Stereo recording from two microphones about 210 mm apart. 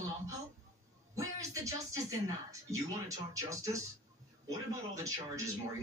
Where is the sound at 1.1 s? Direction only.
15° right (ahead or behind).